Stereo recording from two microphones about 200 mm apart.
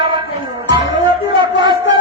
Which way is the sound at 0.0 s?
25° right (ahead or behind).